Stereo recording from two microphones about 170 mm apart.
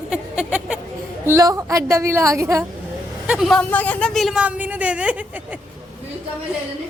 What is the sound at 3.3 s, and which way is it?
A woman's voice, centre (ahead or behind).